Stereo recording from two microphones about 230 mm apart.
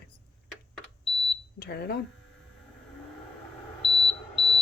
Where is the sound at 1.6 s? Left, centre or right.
Left.